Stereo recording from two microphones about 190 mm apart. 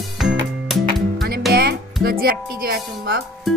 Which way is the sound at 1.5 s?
55° right (ahead or behind).